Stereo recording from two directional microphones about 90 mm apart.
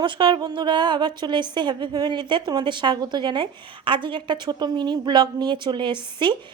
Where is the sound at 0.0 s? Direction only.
60° right (ahead or behind).